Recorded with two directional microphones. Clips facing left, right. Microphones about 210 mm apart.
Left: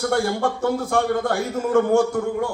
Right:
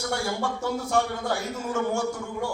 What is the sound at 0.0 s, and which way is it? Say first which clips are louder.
A man's voice: left 7 dB; 55° left (ahead or behind).